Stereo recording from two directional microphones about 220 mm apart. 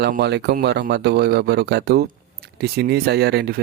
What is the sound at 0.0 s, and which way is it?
Speech, 50° right (ahead or behind).